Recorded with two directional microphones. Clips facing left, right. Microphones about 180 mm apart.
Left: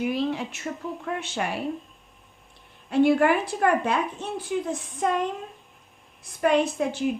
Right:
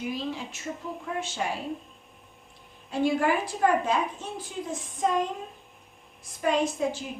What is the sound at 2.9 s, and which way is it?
A woman's voice, 65° left (ahead or behind).